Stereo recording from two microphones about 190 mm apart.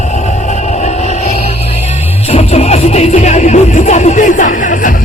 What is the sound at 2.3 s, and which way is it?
Music, 35° left (ahead or behind).